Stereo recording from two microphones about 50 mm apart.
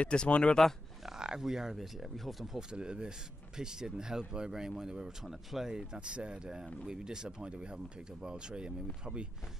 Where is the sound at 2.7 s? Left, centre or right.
Centre.